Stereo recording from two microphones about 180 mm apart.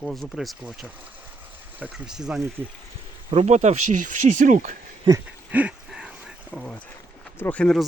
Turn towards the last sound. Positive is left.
turn(degrees=5)  # may be behind; listen again after turning